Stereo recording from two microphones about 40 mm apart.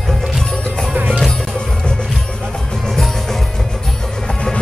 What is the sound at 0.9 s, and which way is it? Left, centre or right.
Music, right.